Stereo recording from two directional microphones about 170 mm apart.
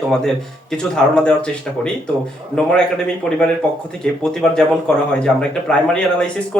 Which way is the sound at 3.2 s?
Centre (ahead or behind).